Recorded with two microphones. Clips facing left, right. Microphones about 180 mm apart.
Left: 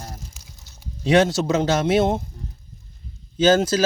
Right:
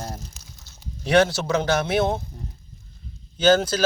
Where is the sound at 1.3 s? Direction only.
20° left (ahead or behind).